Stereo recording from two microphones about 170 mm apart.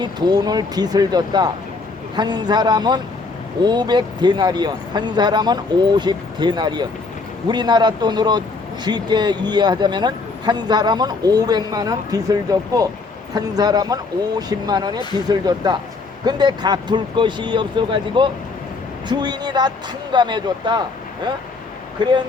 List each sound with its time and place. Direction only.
0.0 s speech: 25° right (ahead or behind)